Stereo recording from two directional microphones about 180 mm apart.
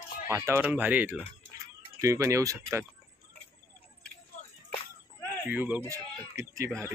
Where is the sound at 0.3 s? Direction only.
10° right (ahead or behind).